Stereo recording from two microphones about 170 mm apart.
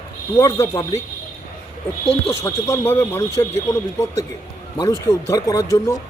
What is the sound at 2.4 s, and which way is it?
Speech, 15° left (ahead or behind).